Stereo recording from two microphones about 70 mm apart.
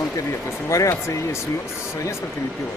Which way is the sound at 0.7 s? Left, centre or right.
Left.